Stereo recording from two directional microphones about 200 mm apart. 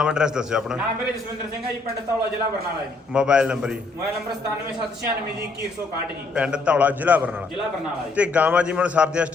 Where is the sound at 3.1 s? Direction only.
5° right (ahead or behind).